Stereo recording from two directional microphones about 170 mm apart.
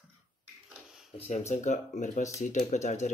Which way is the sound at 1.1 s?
40° left (ahead or behind).